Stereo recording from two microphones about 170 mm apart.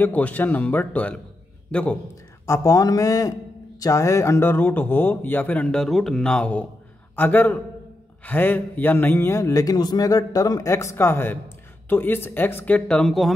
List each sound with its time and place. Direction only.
0.0 s a man's voice: 10° left (ahead or behind)
2.4 s a man's voice: 15° left (ahead or behind); by 13.3 s centre (ahead or behind)